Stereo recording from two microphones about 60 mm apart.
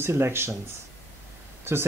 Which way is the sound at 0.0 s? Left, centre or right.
Right.